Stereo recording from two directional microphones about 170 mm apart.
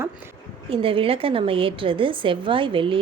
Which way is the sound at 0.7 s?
30° right (ahead or behind).